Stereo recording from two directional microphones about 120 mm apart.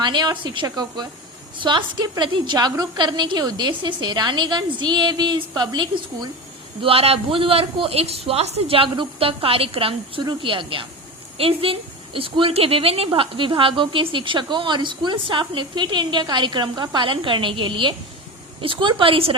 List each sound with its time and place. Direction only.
0.0 s a woman's voice: 40° right (ahead or behind)
6.8 s a woman's voice: 55° right (ahead or behind)